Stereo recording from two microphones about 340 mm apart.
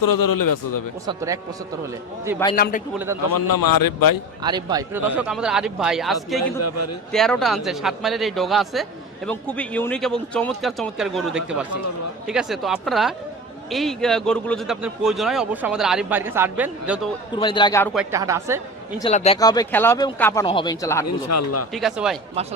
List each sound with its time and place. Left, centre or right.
0.0 s a man's voice: left
1.0 s a woman's voice: centre
2.6 s a man's voice: left
3.0 s a woman's voice: centre
3.3 s a man's voice: left
4.4 s a man's voice: centre
6.6 s speech: left
7.1 s a man's voice: centre
17.3 s speech: centre
18.1 s a woman's voice: centre
18.9 s speech: centre
21.2 s speech: left
21.7 s a man's voice: centre